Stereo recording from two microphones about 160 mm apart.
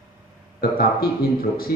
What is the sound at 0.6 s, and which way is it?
A man's voice, 70° left (ahead or behind).